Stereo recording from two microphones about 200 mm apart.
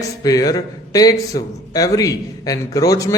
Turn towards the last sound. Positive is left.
turn(degrees=15)  # may be behind; listen again after turning